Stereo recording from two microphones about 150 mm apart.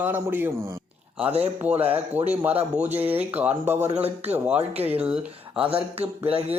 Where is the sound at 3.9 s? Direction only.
45° right (ahead or behind).